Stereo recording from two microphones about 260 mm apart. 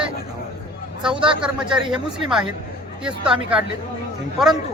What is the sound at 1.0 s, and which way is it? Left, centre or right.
Speech, centre.